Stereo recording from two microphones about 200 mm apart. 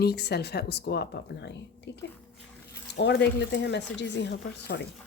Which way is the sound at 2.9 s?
60° left (ahead or behind).